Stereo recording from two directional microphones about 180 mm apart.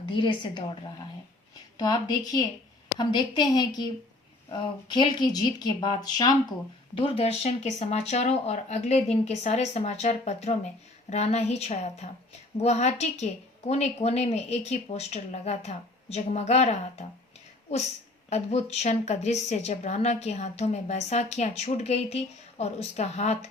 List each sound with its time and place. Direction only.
0.0 s a woman's voice: 25° left (ahead or behind)
1.8 s speech: 20° left (ahead or behind)
7.0 s a woman's voice: 35° left (ahead or behind)
18.3 s a woman's voice: 40° left (ahead or behind)